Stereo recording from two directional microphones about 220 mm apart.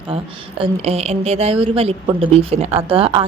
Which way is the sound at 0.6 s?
30° right (ahead or behind).